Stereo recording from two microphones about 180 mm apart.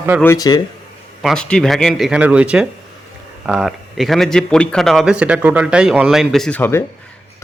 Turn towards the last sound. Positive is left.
turn(degrees=10)  # may be behind; listen again after turning